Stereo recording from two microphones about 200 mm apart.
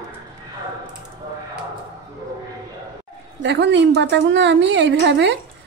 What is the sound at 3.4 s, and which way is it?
A woman's voice, 60° right (ahead or behind).